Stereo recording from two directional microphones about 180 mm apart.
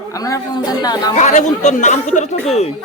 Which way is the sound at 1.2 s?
40° left (ahead or behind).